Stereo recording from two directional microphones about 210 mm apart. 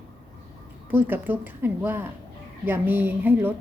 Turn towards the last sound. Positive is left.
turn(degrees=-10)  # may be behind; listen again after turning